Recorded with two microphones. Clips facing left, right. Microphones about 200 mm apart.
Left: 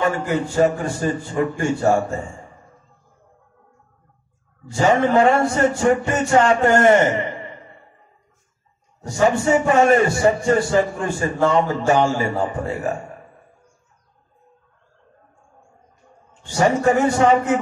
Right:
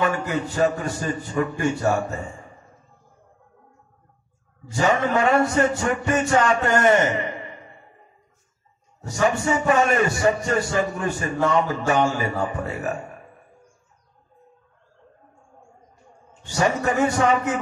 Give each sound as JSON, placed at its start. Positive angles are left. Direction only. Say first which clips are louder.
{"t": 0.3, "sound": "a man's voice", "louder": "left 4 dB", "side_deg": 30}
{"t": 5.0, "sound": "a man's voice", "louder": "left 4 dB", "side_deg": 30}
{"t": 9.1, "sound": "a man's voice", "louder": "left 5 dB", "side_deg": 30}
{"t": 16.4, "sound": "a man's voice", "louder": "left 5 dB", "side_deg": 30}